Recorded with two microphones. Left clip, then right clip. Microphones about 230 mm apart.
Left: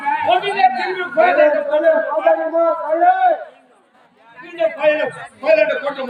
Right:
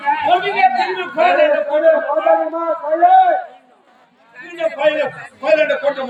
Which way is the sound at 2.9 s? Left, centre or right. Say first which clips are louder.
Right 5 dB; right.